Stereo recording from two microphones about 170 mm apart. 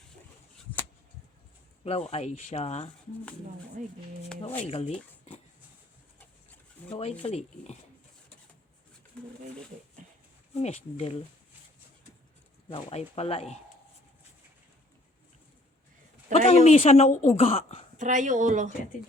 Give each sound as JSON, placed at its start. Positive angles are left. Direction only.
{"t": 1.8, "sound": "a woman's voice", "side_deg": 35}
{"t": 4.4, "sound": "a woman's voice", "side_deg": 35}
{"t": 6.1, "sound": "bird", "side_deg": 10}
{"t": 6.9, "sound": "a woman's voice", "side_deg": 35}
{"t": 10.5, "sound": "a woman's voice", "side_deg": 40}
{"t": 12.6, "sound": "a woman's voice", "side_deg": 35}
{"t": 16.5, "sound": "a woman's voice", "side_deg": 40}
{"t": 17.9, "sound": "speech", "side_deg": -45}